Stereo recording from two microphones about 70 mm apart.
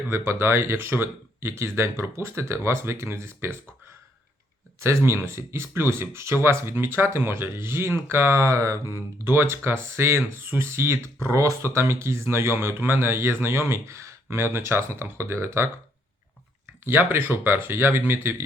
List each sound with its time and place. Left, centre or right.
0.1 s speech: right
4.8 s speech: right
9.2 s speech: right
16.8 s speech: right